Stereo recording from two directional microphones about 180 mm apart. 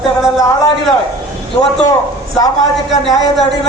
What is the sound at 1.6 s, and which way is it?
Speech, 20° left (ahead or behind).